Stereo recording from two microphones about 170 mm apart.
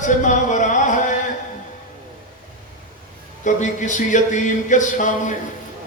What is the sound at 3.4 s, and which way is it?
Music, 45° left (ahead or behind).